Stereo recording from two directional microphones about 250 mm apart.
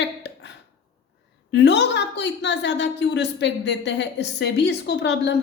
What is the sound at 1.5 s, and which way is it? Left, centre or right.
A woman's voice, left.